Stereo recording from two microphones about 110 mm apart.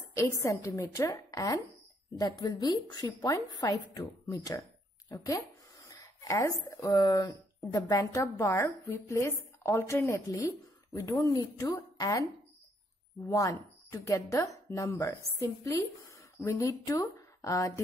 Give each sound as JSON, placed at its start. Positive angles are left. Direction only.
{"t": 0.1, "sound": "a woman's voice", "side_deg": 30}
{"t": 13.3, "sound": "speech", "side_deg": 30}